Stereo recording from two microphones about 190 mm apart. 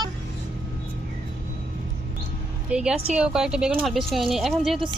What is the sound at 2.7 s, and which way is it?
Speech, 5° right (ahead or behind).